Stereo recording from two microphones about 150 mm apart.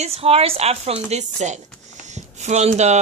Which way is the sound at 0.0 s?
40° right (ahead or behind).